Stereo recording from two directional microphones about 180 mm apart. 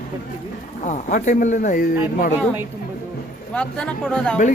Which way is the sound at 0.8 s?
45° left (ahead or behind).